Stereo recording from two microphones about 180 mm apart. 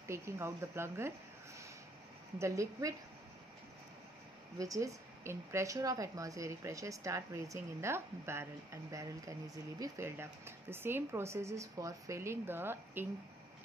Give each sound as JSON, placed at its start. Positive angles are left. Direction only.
{"t": 0.1, "sound": "a woman's voice", "side_deg": -15}
{"t": 2.3, "sound": "a woman's voice", "side_deg": -15}
{"t": 4.6, "sound": "a woman's voice", "side_deg": -20}